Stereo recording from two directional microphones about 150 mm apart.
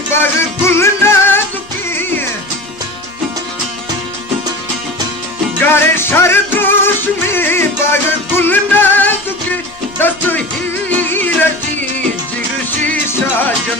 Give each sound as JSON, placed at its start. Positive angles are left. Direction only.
{"t": 0.1, "sound": "music", "side_deg": 15}
{"t": 5.7, "sound": "music", "side_deg": 15}
{"t": 12.8, "sound": "music", "side_deg": 10}